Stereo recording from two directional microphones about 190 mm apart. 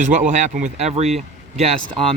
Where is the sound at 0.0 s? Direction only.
40° right (ahead or behind).